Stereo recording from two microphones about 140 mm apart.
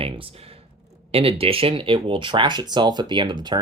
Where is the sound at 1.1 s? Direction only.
40° right (ahead or behind).